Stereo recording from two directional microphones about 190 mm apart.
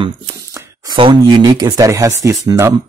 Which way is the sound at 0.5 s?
20° right (ahead or behind).